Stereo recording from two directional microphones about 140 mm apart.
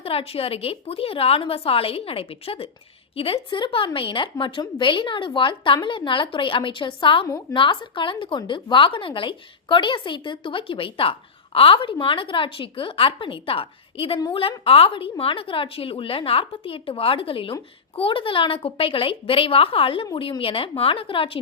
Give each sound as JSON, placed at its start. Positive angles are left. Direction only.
{"t": 0.0, "sound": "a woman's voice", "side_deg": 45}